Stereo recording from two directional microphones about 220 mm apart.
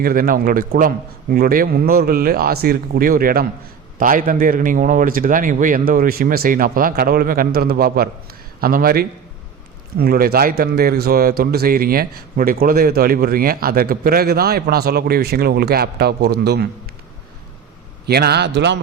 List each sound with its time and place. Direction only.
0.0 s a man's voice: 40° right (ahead or behind)
18.0 s a man's voice: 45° right (ahead or behind)